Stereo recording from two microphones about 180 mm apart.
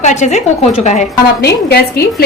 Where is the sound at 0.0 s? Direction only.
40° left (ahead or behind).